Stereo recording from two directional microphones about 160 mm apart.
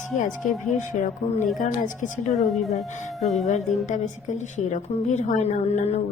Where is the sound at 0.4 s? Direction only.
55° left (ahead or behind).